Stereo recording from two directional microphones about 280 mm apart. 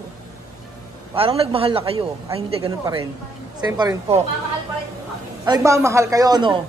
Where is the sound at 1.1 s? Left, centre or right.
Centre.